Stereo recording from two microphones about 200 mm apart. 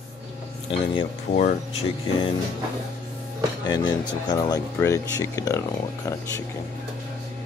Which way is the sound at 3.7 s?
20° left (ahead or behind).